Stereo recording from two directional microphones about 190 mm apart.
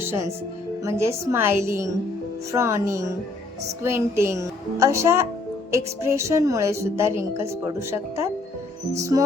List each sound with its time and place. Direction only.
0.0 s speech: 10° right (ahead or behind)